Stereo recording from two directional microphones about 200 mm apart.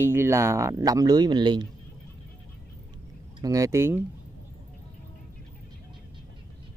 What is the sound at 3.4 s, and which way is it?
Speech, 15° right (ahead or behind).